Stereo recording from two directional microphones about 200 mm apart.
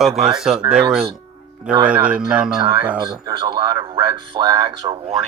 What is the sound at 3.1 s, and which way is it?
Speech, 20° right (ahead or behind).